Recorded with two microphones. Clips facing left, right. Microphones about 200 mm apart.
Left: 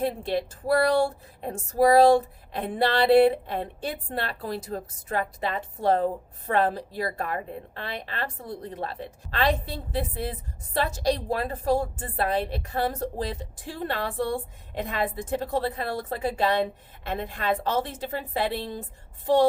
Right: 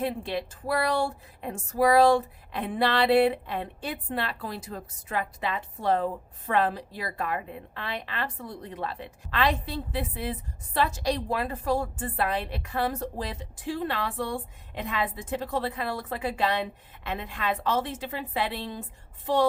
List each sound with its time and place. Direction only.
0.0 s speech: 40° left (ahead or behind)